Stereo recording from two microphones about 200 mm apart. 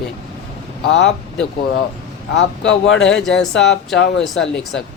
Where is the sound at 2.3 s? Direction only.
65° left (ahead or behind).